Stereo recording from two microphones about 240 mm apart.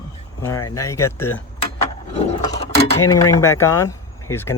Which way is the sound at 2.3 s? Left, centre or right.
Left.